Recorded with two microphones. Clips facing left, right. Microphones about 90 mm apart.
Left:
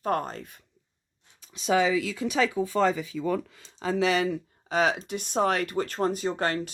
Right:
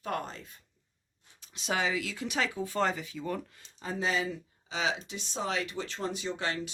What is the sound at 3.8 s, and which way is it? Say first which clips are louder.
Speech: left 7 dB; 90° left.